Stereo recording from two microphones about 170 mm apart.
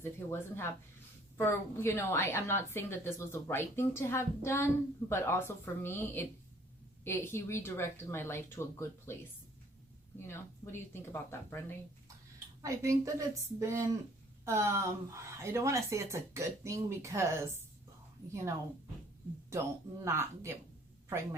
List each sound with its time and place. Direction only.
0.0 s a woman's voice: 15° left (ahead or behind)
10.2 s a woman's voice: 15° left (ahead or behind)
12.6 s a woman's voice: 20° right (ahead or behind)
20.1 s speech: 15° right (ahead or behind)